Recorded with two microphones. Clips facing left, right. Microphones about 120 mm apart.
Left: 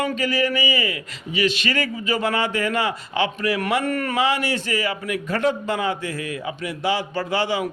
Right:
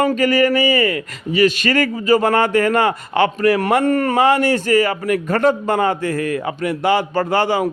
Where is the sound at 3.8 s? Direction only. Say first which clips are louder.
Right 8 dB; 30° right (ahead or behind).